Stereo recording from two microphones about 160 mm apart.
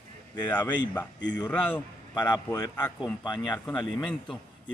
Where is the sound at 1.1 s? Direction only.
90° left.